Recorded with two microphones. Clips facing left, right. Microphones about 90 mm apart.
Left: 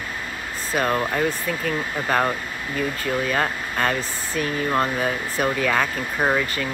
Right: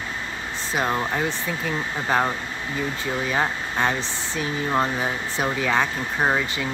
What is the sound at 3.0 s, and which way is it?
Speech, 20° right (ahead or behind).